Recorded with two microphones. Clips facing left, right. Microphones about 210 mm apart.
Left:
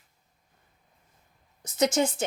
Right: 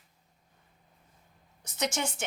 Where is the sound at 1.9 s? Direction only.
35° left (ahead or behind).